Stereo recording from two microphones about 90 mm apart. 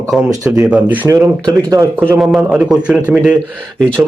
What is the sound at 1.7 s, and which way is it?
Speech, 45° right (ahead or behind).